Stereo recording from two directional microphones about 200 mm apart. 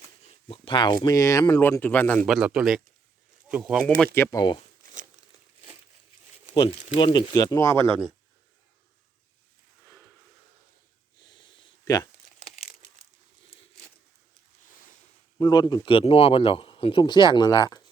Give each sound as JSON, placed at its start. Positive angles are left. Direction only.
{"t": 0.4, "sound": "speech", "side_deg": 25}
{"t": 3.9, "sound": "speech", "side_deg": 10}
{"t": 6.5, "sound": "speech", "side_deg": 25}
{"t": 11.3, "sound": "a sound", "side_deg": 20}
{"t": 15.4, "sound": "speech", "side_deg": 20}